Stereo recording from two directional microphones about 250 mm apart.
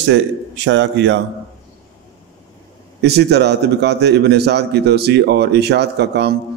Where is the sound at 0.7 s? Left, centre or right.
Right.